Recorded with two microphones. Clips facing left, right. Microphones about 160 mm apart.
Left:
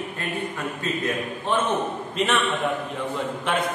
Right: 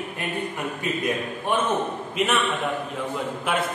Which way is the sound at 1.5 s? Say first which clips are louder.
Even; 10° right (ahead or behind).